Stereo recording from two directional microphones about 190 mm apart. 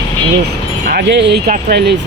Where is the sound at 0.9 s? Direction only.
65° right (ahead or behind).